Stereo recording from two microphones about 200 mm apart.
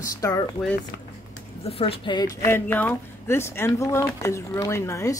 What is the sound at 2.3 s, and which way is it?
Speech, 10° left (ahead or behind).